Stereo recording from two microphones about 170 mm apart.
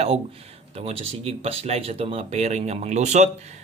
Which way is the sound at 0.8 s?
35° right (ahead or behind).